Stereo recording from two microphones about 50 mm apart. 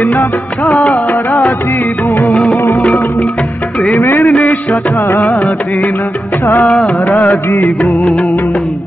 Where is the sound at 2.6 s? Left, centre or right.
Left.